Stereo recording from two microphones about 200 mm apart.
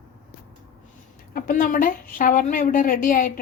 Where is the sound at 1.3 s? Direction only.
45° left (ahead or behind).